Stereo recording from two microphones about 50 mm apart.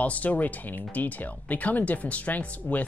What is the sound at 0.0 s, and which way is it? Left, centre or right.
Speech, left.